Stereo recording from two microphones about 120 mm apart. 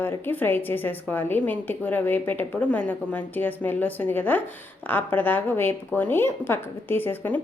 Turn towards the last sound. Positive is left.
turn(degrees=15)  # may be behind; listen again after turning